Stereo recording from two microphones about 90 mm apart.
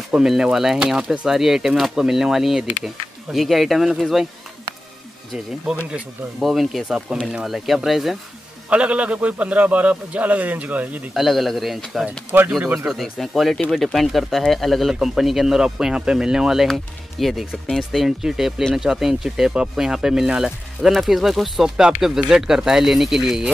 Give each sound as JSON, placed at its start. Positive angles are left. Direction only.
{"t": 0.1, "sound": "speech", "side_deg": -5}
{"t": 6.4, "sound": "speech", "side_deg": 0}
{"t": 8.6, "sound": "a man's voice", "side_deg": -15}
{"t": 11.1, "sound": "speech", "side_deg": 0}